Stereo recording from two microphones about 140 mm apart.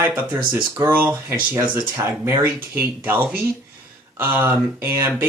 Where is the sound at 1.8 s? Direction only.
20° right (ahead or behind).